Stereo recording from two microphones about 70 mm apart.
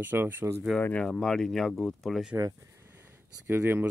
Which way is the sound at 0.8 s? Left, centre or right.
Left.